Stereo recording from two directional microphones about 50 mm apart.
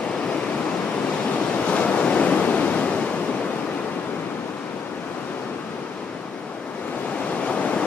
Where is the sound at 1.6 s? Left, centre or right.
Left.